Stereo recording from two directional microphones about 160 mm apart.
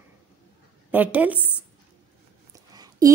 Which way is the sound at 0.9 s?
10° right (ahead or behind).